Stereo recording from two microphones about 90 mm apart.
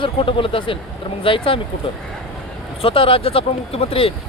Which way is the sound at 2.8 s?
90° left.